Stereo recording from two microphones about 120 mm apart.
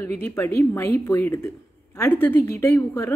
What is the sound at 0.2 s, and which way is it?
A woman's voice, 20° left (ahead or behind).